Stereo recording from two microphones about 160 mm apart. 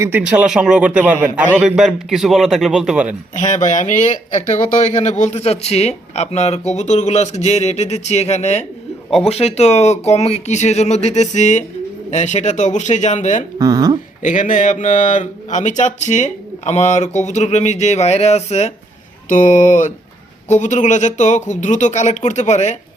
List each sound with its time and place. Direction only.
0.0 s a man's voice: 10° right (ahead or behind)
3.3 s speech: 50° left (ahead or behind)
9.0 s speech: centre (ahead or behind)
9.3 s speech: 40° left (ahead or behind)
13.6 s speech: 20° right (ahead or behind)
14.2 s speech: 55° left (ahead or behind)